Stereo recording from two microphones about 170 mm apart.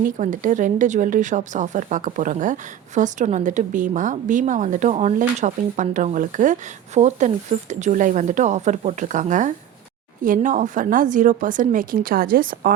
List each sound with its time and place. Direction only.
0.2 s speech: 50° right (ahead or behind)